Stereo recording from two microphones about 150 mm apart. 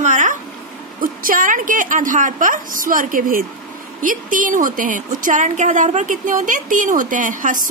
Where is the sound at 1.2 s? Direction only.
65° right (ahead or behind).